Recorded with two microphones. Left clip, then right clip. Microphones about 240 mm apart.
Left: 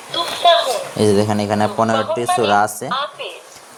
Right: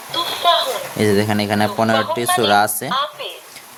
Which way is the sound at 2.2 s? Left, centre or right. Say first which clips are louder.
Left 1 dB; right.